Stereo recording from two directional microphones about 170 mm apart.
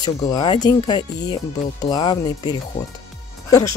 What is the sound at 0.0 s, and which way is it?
Speech, 25° left (ahead or behind).